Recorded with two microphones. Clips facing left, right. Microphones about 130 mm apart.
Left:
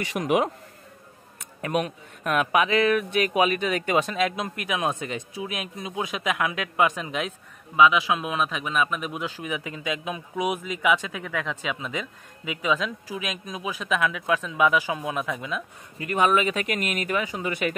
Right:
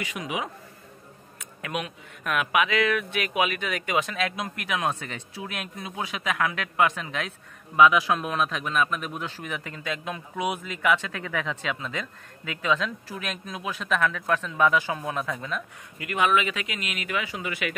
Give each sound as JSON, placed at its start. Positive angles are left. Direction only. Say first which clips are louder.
{"t": 0.2, "sound": "speech", "louder": "left 10 dB", "side_deg": 50}
{"t": 1.6, "sound": "speech", "louder": "left 6 dB", "side_deg": 40}
{"t": 7.7, "sound": "speech", "louder": "even", "side_deg": 0}
{"t": 11.6, "sound": "speech", "louder": "left 1 dB", "side_deg": 15}
{"t": 16.0, "sound": "speech", "louder": "left 2 dB", "side_deg": 30}
{"t": 16.6, "sound": "speech", "louder": "left 6 dB", "side_deg": 50}